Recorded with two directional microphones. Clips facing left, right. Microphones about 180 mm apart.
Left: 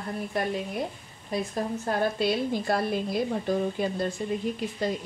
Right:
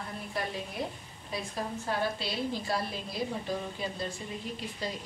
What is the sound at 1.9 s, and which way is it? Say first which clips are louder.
A woman's voice: left 8 dB; 50° left (ahead or behind).